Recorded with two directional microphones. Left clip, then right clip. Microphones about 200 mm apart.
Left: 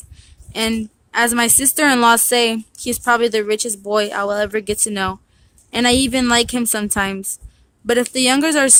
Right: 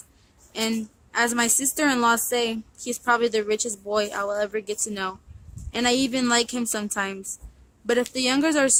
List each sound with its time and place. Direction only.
0.5 s a woman's voice: 40° left (ahead or behind)